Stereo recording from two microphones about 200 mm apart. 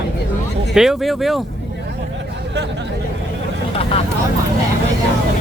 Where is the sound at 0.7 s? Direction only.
Centre (ahead or behind).